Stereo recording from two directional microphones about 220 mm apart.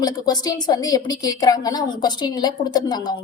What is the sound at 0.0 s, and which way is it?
A woman's voice, 15° left (ahead or behind).